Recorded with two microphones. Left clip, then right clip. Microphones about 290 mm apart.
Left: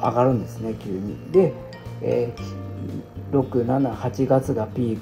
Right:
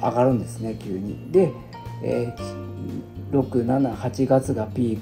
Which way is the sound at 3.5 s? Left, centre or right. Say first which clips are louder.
Even; right.